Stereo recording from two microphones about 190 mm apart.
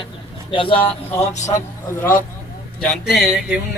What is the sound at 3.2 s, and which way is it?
Music, 5° right (ahead or behind).